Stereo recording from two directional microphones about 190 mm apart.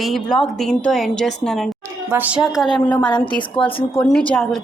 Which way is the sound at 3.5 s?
25° left (ahead or behind).